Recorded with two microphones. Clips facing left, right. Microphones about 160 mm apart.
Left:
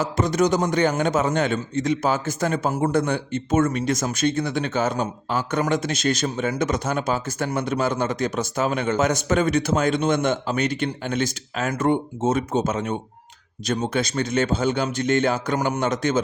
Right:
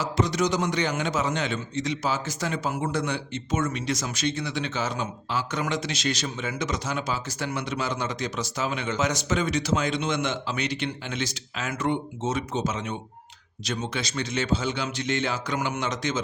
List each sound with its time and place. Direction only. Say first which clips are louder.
0.0 s a man's voice: left 4 dB; 50° left (ahead or behind)